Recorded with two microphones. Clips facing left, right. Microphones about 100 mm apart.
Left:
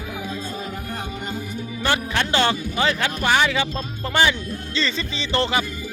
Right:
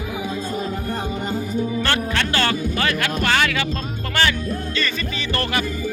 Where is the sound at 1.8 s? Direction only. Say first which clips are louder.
Right 1 dB; 15° left (ahead or behind).